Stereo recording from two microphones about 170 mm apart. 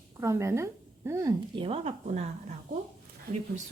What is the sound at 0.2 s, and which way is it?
Speech, 15° right (ahead or behind).